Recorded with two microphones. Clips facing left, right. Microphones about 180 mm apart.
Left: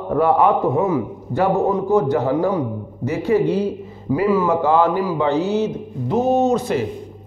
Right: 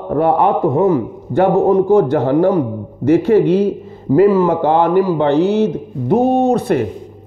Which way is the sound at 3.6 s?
50° right (ahead or behind).